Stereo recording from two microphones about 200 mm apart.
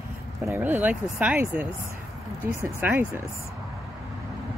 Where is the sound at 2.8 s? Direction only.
10° right (ahead or behind).